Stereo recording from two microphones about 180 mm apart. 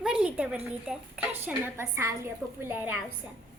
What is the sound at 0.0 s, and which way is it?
A woman's voice, 5° right (ahead or behind).